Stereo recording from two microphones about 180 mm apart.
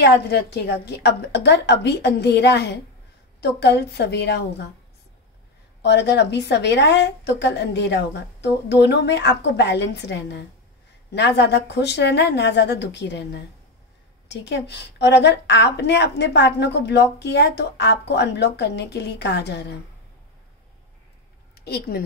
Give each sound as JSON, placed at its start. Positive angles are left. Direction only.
{"t": 0.0, "sound": "a woman's voice", "side_deg": 65}
{"t": 5.8, "sound": "a woman's voice", "side_deg": 70}
{"t": 21.5, "sound": "a woman's voice", "side_deg": 60}